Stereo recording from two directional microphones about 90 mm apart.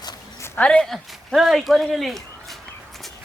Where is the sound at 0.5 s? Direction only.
10° left (ahead or behind).